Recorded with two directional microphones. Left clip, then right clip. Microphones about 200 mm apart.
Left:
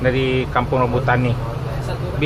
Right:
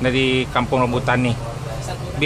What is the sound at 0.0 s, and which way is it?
Speech, 40° right (ahead or behind).